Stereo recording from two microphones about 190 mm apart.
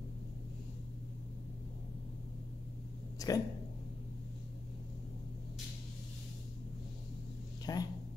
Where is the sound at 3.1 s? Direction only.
20° left (ahead or behind).